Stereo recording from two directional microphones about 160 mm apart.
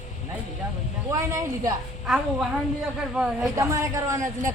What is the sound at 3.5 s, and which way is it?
A man's voice, 20° right (ahead or behind).